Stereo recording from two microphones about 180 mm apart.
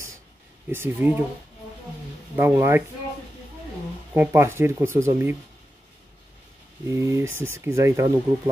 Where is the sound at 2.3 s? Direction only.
15° right (ahead or behind).